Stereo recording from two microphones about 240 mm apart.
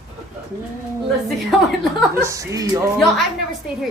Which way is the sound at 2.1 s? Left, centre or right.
Centre.